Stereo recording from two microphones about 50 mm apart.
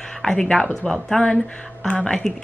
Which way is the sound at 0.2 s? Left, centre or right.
Centre.